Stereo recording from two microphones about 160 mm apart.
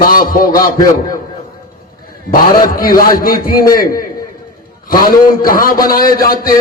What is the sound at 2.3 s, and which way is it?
A man's voice, 60° left (ahead or behind).